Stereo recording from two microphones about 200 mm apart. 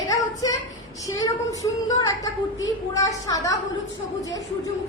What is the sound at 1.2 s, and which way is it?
A woman's voice, 15° left (ahead or behind).